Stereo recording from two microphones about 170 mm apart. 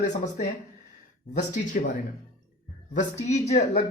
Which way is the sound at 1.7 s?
50° left (ahead or behind).